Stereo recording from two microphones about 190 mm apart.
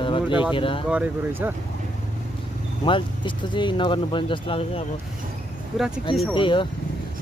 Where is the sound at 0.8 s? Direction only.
5° right (ahead or behind).